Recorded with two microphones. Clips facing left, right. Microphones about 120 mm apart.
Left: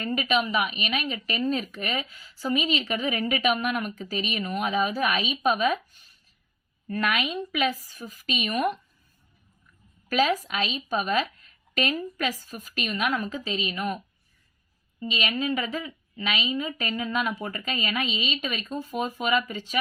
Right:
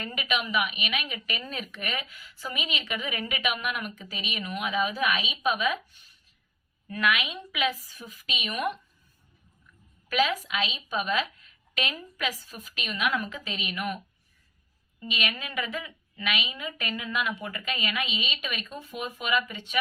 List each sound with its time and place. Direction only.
0.0 s a woman's voice: 40° left (ahead or behind)
10.1 s a woman's voice: 40° left (ahead or behind)
15.0 s a woman's voice: 30° left (ahead or behind)